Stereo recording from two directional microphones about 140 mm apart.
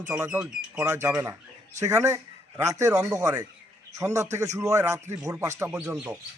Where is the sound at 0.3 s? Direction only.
10° right (ahead or behind).